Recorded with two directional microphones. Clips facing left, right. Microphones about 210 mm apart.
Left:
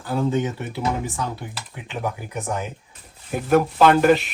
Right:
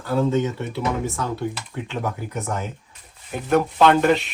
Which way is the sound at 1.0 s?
15° left (ahead or behind).